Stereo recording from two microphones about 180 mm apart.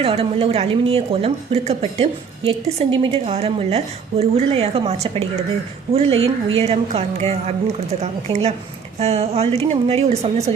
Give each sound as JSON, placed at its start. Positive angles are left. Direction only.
{"t": 0.0, "sound": "a woman's voice", "side_deg": -30}